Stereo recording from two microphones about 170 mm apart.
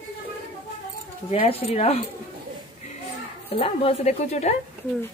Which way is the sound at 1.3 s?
40° left (ahead or behind).